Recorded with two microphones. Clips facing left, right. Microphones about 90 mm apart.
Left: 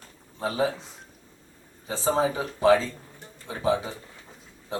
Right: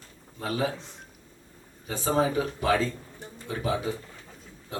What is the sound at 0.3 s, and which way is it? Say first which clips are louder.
Speech: left 3 dB; 25° left (ahead or behind).